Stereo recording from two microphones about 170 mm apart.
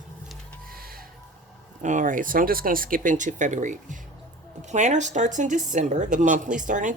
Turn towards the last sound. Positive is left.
turn(degrees=-50)  # may be behind; listen again after turning